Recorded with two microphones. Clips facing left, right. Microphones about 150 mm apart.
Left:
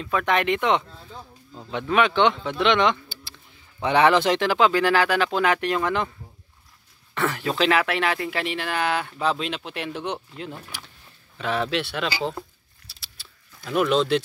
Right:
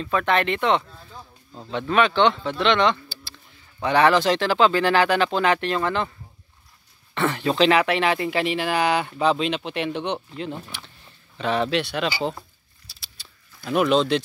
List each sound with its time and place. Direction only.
0.0 s speech: 10° left (ahead or behind)
7.2 s speech: 10° left (ahead or behind)
13.0 s a sound: centre (ahead or behind)